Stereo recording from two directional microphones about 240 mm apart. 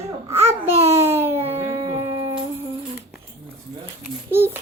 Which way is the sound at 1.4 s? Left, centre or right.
Right.